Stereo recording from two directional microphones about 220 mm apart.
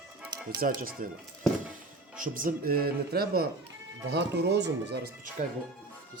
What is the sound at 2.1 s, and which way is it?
A man's voice, 40° right (ahead or behind).